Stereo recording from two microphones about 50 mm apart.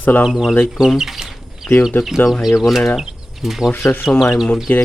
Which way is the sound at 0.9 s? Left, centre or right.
Centre.